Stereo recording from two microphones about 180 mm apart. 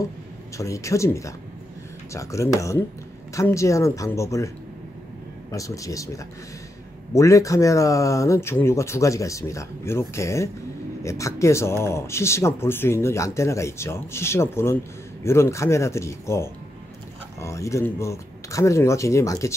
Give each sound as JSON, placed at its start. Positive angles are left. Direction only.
{"t": 0.6, "sound": "speech", "side_deg": 15}
{"t": 5.5, "sound": "speech", "side_deg": 20}